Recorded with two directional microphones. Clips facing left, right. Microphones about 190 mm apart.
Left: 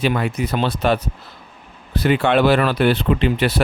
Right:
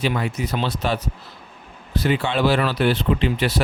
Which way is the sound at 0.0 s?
55° left (ahead or behind).